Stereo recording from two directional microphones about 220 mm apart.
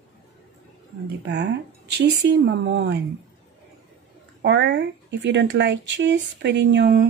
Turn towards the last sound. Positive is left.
turn(degrees=-50)  # may be behind; listen again after turning